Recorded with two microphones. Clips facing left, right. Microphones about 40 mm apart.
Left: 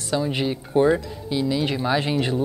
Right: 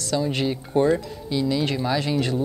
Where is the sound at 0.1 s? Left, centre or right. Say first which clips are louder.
Even; centre.